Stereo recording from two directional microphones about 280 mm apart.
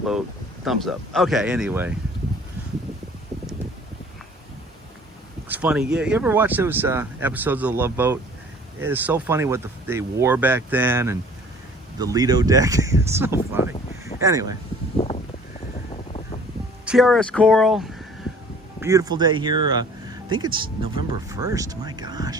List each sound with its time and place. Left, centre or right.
0.6 s speech: centre
5.5 s speech: centre
16.8 s speech: centre
18.8 s speech: centre